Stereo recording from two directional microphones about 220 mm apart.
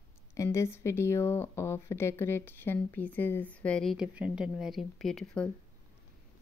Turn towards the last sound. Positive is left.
turn(degrees=5)  # may be behind; listen again after turning